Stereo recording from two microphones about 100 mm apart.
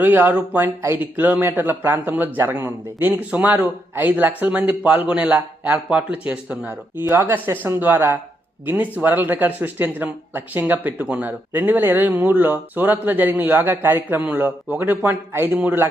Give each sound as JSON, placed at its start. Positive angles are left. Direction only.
{"t": 0.0, "sound": "speech", "side_deg": -20}
{"t": 7.3, "sound": "speech", "side_deg": -20}